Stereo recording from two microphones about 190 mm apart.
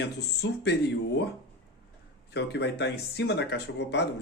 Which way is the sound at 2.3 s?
60° left (ahead or behind).